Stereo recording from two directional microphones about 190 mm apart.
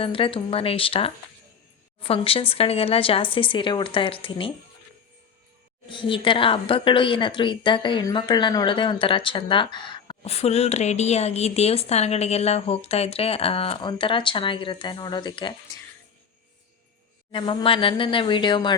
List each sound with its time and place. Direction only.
0.0 s a woman's voice: 30° left (ahead or behind)
5.9 s a woman's voice: 25° left (ahead or behind)
17.3 s a woman's voice: 25° left (ahead or behind)